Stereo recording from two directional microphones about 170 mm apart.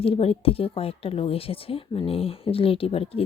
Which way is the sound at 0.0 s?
35° left (ahead or behind).